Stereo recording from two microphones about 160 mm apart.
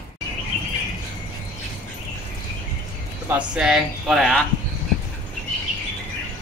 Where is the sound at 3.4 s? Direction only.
5° right (ahead or behind).